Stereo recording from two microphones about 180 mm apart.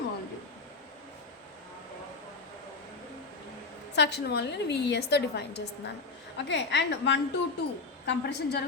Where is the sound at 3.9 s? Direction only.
70° left (ahead or behind).